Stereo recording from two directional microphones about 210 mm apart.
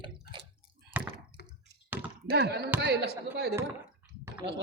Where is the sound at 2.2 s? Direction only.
50° right (ahead or behind).